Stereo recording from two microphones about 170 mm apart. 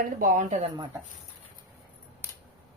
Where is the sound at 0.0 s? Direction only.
55° right (ahead or behind).